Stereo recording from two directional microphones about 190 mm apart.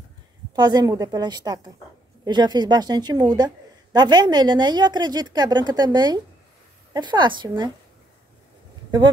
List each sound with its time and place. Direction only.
0.6 s a woman's voice: 20° right (ahead or behind)